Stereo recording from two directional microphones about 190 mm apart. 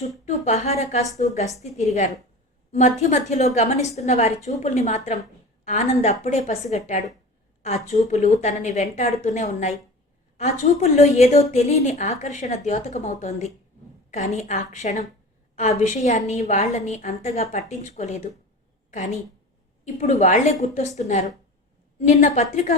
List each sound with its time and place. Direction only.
0.3 s a woman's voice: 35° left (ahead or behind)
19.8 s a woman's voice: 35° left (ahead or behind)